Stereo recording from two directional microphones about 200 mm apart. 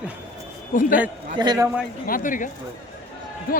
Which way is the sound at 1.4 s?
15° right (ahead or behind).